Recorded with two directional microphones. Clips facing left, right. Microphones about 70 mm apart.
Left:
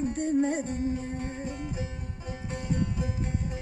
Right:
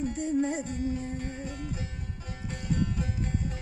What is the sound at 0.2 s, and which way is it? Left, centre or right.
Music, left.